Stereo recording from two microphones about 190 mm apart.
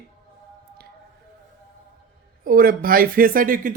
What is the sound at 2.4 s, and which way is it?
Speech, 50° right (ahead or behind).